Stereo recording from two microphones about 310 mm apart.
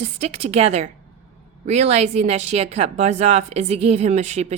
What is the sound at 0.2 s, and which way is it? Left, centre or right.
A woman's voice, centre.